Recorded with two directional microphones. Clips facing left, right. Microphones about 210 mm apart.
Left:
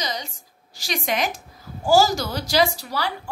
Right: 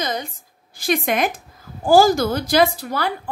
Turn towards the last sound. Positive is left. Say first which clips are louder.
# right 4 dB
turn(degrees=-55)  # may be behind; listen again after turning